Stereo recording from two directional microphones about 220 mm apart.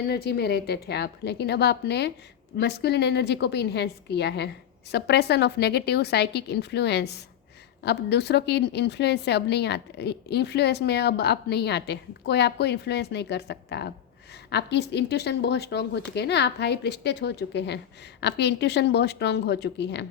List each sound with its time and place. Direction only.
0.0 s a woman's voice: 45° left (ahead or behind)